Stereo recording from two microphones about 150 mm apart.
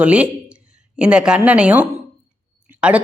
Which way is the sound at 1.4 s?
10° right (ahead or behind).